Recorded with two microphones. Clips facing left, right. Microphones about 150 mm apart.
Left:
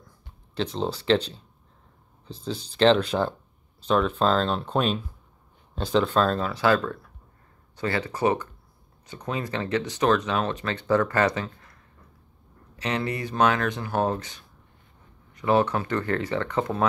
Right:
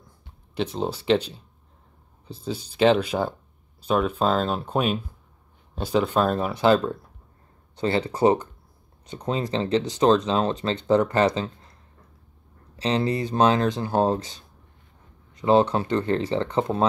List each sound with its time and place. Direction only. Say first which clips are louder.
0.6 s speech: right 1 dB; 10° right (ahead or behind)
12.7 s speech: right 5 dB; 30° right (ahead or behind)